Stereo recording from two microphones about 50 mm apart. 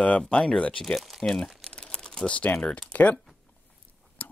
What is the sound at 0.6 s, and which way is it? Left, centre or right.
Speech, left.